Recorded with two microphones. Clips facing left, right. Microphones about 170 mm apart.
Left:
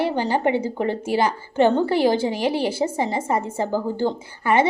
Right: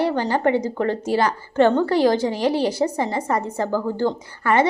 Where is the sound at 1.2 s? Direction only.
10° left (ahead or behind).